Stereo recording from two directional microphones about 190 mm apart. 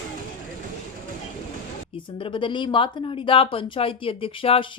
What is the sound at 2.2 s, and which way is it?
Speech, 25° left (ahead or behind).